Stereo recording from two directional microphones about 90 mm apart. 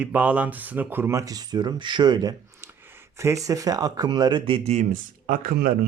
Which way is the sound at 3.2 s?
35° right (ahead or behind).